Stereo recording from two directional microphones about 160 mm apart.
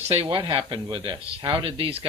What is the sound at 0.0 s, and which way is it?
Speech, 40° right (ahead or behind).